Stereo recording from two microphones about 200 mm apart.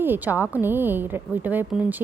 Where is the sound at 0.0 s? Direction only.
10° right (ahead or behind).